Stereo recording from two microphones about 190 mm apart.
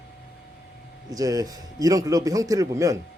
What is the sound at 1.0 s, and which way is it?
A man's voice, 20° right (ahead or behind).